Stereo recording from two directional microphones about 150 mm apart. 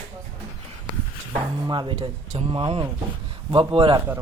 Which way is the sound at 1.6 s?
30° right (ahead or behind).